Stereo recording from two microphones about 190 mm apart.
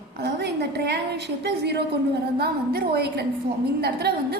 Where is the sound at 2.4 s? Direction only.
55° right (ahead or behind).